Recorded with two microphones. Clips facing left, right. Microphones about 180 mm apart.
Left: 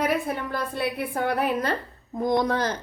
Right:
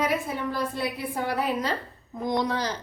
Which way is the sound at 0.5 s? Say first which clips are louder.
Left 2 dB; 60° left (ahead or behind).